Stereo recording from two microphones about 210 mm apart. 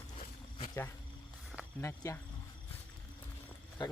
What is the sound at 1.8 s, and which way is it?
Speech, 15° left (ahead or behind).